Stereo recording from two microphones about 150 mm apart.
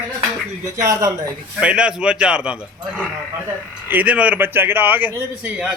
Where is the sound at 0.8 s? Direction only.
20° right (ahead or behind).